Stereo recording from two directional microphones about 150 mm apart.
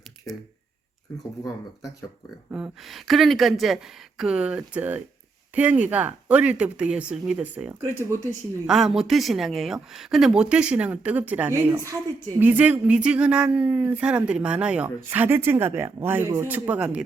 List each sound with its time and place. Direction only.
1.5 s speech: 25° left (ahead or behind)
2.5 s speech: 5° right (ahead or behind)
8.6 s speech: 5° right (ahead or behind)